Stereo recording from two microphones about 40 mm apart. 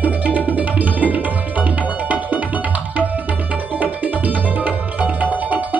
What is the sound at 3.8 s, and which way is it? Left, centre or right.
Music, right.